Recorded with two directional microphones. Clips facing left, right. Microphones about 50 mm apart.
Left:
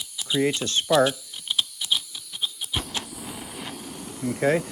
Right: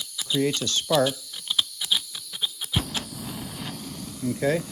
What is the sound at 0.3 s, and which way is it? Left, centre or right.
Speech, left.